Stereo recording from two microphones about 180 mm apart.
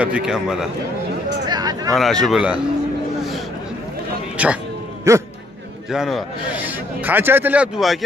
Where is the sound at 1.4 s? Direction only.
20° right (ahead or behind).